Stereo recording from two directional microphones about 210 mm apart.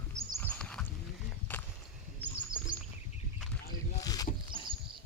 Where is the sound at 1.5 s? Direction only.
10° left (ahead or behind).